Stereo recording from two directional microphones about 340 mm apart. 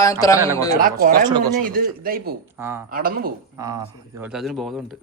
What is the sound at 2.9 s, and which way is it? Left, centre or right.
Speech, right.